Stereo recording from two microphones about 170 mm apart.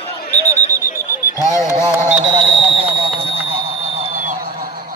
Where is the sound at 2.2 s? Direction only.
40° right (ahead or behind).